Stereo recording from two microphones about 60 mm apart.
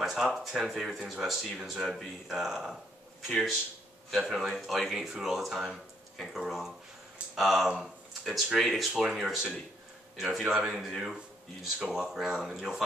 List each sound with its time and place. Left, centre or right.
0.0 s speech: centre
1.9 s speech: centre
2.3 s speech: centre
8.9 s speech: centre